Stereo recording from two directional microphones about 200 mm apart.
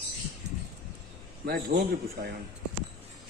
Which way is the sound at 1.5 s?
50° right (ahead or behind).